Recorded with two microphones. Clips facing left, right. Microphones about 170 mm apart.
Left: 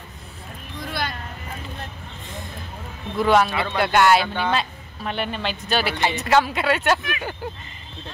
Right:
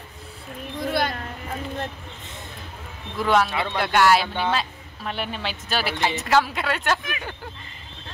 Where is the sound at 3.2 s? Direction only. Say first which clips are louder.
Left 3 dB; centre (ahead or behind).